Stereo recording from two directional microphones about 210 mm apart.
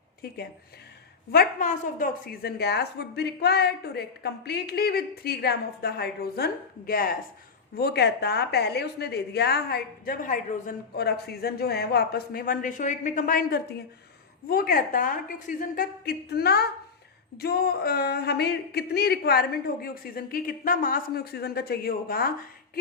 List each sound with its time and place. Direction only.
1.3 s a woman's voice: 45° left (ahead or behind)